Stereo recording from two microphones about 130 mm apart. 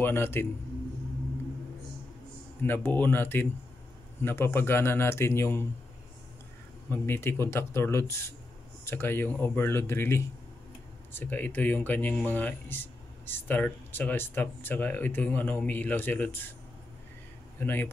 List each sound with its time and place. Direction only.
0.0 s speech: 20° left (ahead or behind)
2.6 s speech: 15° left (ahead or behind)
6.9 s speech: 15° left (ahead or behind)
17.6 s speech: 15° left (ahead or behind)